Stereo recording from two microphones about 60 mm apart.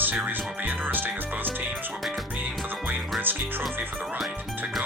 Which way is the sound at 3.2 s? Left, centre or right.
Right.